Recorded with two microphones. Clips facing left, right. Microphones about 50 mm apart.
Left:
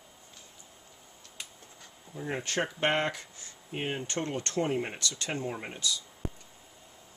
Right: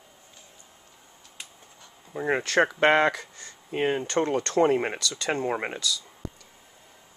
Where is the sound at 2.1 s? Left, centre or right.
Right.